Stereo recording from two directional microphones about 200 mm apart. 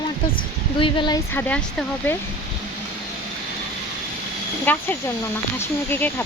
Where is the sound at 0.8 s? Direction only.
25° left (ahead or behind).